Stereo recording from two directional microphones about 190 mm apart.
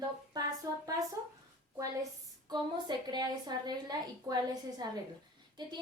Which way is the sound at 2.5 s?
25° right (ahead or behind).